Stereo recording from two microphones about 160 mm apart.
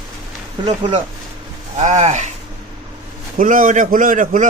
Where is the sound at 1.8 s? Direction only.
45° right (ahead or behind).